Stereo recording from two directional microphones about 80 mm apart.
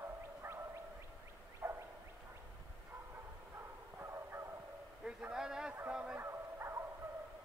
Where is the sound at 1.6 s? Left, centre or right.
Right.